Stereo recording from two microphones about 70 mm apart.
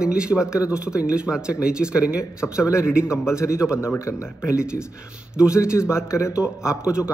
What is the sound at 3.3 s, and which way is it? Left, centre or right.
Speech, left.